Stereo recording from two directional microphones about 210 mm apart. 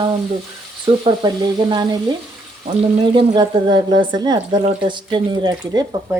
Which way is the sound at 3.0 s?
20° right (ahead or behind).